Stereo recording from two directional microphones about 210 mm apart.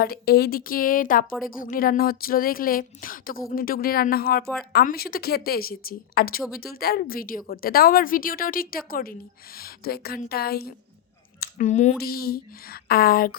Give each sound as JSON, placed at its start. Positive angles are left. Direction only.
{"t": 0.0, "sound": "speech", "side_deg": 45}